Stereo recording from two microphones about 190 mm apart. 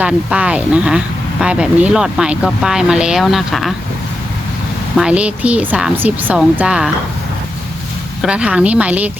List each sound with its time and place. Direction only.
0.0 s speech: 5° right (ahead or behind)
4.9 s a woman's voice: 5° right (ahead or behind)
8.2 s a woman's voice: 5° right (ahead or behind)